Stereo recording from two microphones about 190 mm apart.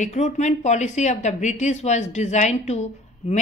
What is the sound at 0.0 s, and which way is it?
A woman's voice, 40° left (ahead or behind).